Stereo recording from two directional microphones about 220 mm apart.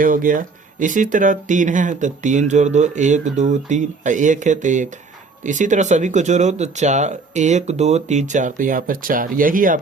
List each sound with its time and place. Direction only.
0.0 s speech: 40° right (ahead or behind)